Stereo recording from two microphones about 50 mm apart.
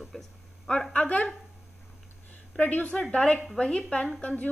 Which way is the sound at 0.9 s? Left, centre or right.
Left.